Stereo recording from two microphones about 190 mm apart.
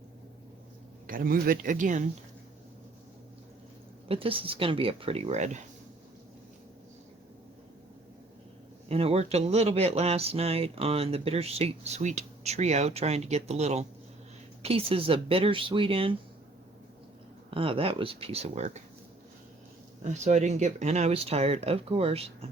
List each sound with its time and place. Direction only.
1.0 s speech: 50° right (ahead or behind)
4.1 s speech: 30° right (ahead or behind)
8.9 s speech: 30° right (ahead or behind)
17.5 s speech: 30° right (ahead or behind)
20.1 s speech: 35° right (ahead or behind)